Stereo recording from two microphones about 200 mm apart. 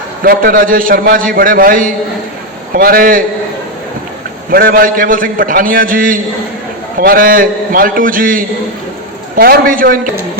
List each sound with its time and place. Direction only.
0.2 s a man's voice: 45° right (ahead or behind)
4.5 s a man's voice: 45° right (ahead or behind)